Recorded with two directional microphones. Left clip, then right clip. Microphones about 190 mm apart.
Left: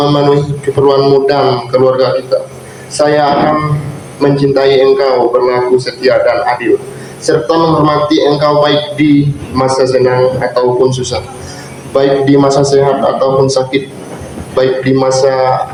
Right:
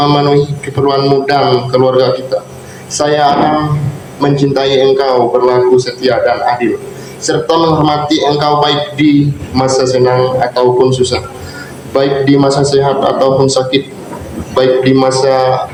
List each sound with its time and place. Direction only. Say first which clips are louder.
0.0 s a man's voice: even; 45° right (ahead or behind)